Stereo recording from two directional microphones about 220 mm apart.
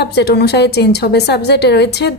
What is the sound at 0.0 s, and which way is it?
A woman's voice, 50° left (ahead or behind).